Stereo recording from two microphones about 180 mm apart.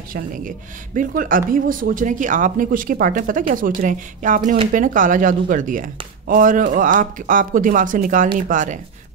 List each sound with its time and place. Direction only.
0.1 s speech: 50° right (ahead or behind)